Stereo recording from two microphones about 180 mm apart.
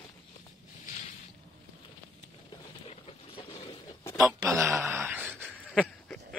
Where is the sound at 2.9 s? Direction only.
30° left (ahead or behind).